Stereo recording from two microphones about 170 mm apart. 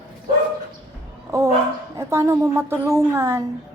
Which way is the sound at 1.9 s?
15° right (ahead or behind).